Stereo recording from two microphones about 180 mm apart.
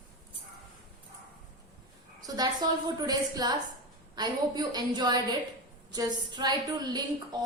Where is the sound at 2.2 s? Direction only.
20° right (ahead or behind).